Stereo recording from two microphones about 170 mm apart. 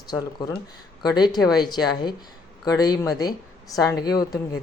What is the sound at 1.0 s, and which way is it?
A woman's voice, 25° left (ahead or behind).